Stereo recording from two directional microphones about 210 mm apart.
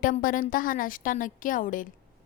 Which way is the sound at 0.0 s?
40° left (ahead or behind).